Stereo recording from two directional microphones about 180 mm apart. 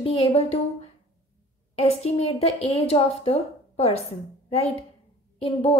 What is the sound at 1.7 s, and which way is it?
A woman's voice, 35° left (ahead or behind).